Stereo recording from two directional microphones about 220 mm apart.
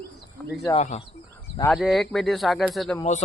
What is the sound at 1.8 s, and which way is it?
Speech, centre (ahead or behind).